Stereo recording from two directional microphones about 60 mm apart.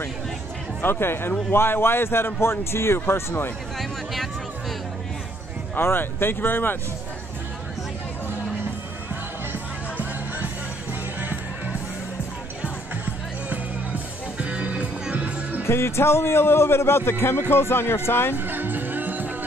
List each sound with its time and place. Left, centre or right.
0.8 s a man's voice: left
5.8 s speech: left
9.1 s music: right
14.4 s music: right
15.6 s a man's voice: left
18.3 s music: right